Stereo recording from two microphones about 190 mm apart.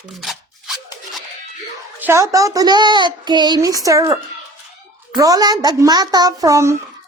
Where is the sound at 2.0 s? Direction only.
15° right (ahead or behind).